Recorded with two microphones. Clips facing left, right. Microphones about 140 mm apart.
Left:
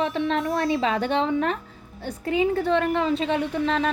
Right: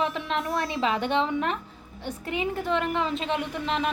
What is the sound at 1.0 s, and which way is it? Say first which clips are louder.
A woman's voice: left 3 dB; 40° left (ahead or behind).